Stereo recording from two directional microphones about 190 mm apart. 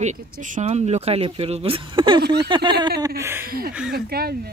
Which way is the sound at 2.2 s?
60° right (ahead or behind).